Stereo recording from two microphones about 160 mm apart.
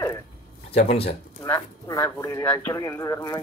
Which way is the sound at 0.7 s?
40° left (ahead or behind).